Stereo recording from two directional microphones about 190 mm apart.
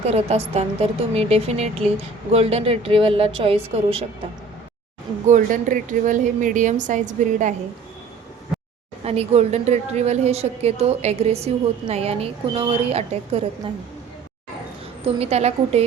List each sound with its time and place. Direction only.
0.0 s a woman's voice: 35° right (ahead or behind)
5.3 s a woman's voice: 45° right (ahead or behind)
9.0 s a woman's voice: 35° right (ahead or behind)
15.0 s a woman's voice: 35° right (ahead or behind)